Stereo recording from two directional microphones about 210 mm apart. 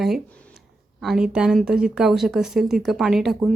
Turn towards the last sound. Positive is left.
turn(degrees=0)  # may be behind; listen again after turning